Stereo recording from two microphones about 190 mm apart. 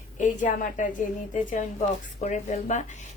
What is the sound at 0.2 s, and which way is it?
A woman's voice, 40° left (ahead or behind).